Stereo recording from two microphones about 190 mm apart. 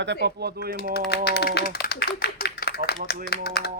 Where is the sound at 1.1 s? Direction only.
60° left (ahead or behind).